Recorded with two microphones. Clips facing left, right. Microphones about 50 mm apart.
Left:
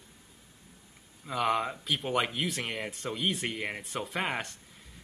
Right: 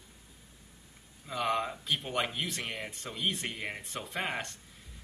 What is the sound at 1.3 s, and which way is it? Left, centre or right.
A man's voice, centre.